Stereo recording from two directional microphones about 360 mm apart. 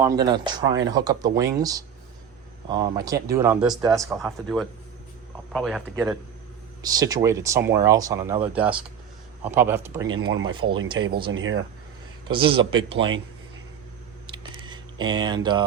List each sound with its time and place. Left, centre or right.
0.0 s speech: centre
11.3 s speech: right
12.3 s speech: centre
14.6 s a sound: centre